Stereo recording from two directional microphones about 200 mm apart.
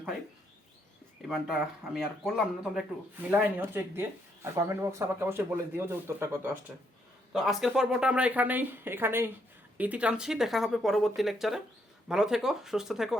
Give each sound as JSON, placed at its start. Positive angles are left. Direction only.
{"t": 1.3, "sound": "speech", "side_deg": 0}
{"t": 7.3, "sound": "speech", "side_deg": 0}